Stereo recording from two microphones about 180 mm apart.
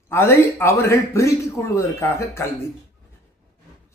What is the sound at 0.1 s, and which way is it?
Speech, 15° left (ahead or behind).